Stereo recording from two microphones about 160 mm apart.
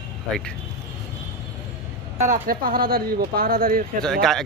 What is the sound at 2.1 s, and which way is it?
Speech, 50° right (ahead or behind).